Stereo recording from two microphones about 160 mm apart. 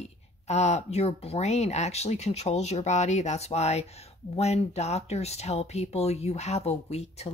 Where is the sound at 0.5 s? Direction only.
45° left (ahead or behind).